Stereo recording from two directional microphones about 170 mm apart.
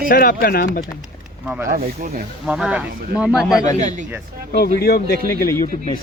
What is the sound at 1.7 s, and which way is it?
Speech, 55° right (ahead or behind).